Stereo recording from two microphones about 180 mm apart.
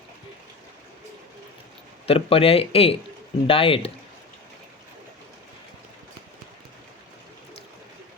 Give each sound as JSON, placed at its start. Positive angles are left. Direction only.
{"t": 2.0, "sound": "speech", "side_deg": 30}